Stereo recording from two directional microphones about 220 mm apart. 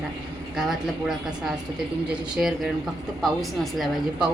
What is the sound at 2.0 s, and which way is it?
A woman's voice, 5° right (ahead or behind).